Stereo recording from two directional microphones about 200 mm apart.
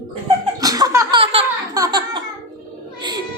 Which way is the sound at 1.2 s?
30° right (ahead or behind).